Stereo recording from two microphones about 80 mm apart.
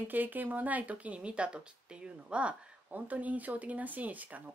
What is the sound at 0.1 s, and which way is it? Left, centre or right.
Speech, right.